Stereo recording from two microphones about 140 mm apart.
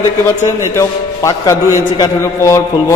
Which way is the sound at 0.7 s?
20° left (ahead or behind).